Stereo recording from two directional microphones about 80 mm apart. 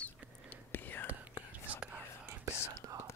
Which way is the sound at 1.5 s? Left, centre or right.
Centre.